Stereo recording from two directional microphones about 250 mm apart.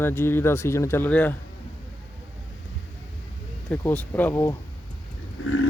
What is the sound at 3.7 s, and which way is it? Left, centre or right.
Speech, centre.